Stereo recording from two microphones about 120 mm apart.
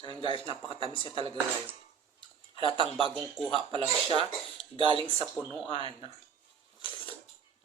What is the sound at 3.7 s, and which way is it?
Speech, 45° right (ahead or behind).